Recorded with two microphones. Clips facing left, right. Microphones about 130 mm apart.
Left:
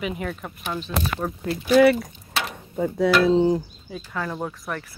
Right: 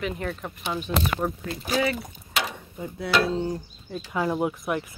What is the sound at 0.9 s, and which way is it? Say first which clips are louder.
Speech: right 2 dB; 25° right (ahead or behind).